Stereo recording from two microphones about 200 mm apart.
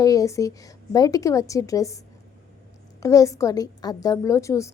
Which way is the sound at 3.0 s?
15° left (ahead or behind).